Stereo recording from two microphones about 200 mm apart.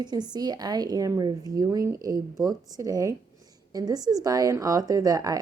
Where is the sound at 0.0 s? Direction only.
20° right (ahead or behind).